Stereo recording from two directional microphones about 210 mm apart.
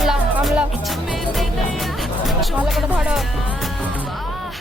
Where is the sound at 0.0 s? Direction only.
Centre (ahead or behind).